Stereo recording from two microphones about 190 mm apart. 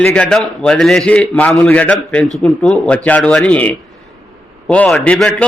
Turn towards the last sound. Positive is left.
turn(degrees=5)  # may be behind; listen again after turning